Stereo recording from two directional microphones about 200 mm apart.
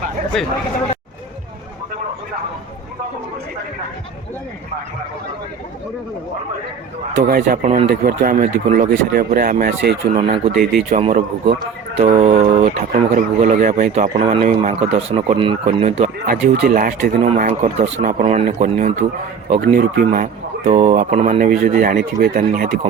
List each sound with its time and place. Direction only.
0.3 s speech: centre (ahead or behind)
7.2 s speech: 45° right (ahead or behind)
7.9 s speech: 45° right (ahead or behind)
10.2 s speech: 30° right (ahead or behind)
16.3 s speech: 50° right (ahead or behind)
17.2 s speech: 35° right (ahead or behind); by 20.1 s 50° right (ahead or behind)
20.7 s speech: 35° right (ahead or behind)